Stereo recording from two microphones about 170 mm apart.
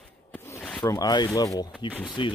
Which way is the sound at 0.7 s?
20° left (ahead or behind).